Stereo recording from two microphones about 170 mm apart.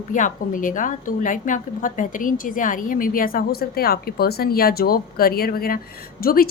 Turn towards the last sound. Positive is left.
turn(degrees=60)  # may be behind; listen again after turning